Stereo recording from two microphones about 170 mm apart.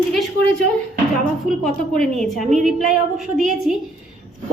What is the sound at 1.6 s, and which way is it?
A woman's voice, centre (ahead or behind).